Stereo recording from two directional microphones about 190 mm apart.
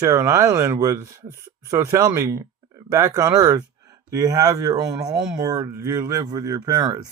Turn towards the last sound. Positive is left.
turn(degrees=-20)  # may be behind; listen again after turning